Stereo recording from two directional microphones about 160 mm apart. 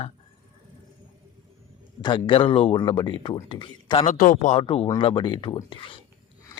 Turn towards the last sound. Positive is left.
turn(degrees=30)  # may be behind; listen again after turning